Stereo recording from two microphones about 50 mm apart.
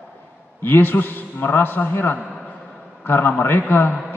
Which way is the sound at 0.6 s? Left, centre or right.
Left.